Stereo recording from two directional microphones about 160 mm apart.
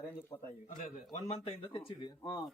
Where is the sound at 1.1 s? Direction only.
40° left (ahead or behind).